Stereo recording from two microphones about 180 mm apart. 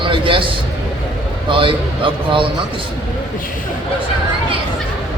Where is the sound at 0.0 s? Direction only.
30° right (ahead or behind).